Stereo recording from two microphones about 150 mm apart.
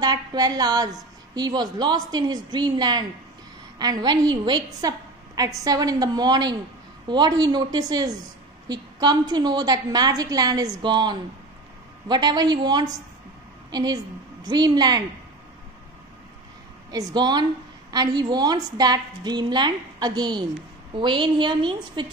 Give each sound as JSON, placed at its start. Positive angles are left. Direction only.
{"t": 0.0, "sound": "a woman's voice", "side_deg": -25}
{"t": 16.9, "sound": "a woman's voice", "side_deg": -25}